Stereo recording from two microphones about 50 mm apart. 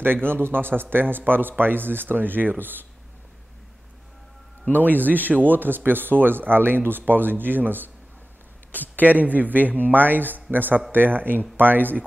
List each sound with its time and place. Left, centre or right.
0.0 s speech: right
4.7 s speech: right
8.7 s speech: left
9.0 s speech: right